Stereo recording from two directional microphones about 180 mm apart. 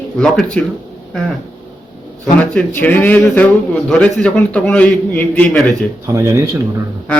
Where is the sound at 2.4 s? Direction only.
10° left (ahead or behind).